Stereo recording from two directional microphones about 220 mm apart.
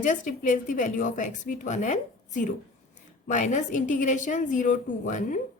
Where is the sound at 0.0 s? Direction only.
35° left (ahead or behind).